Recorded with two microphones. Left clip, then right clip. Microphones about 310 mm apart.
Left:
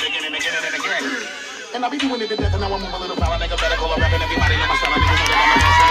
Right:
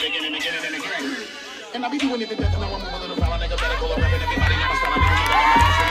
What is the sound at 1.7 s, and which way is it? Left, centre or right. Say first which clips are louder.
Music: left 2 dB; left.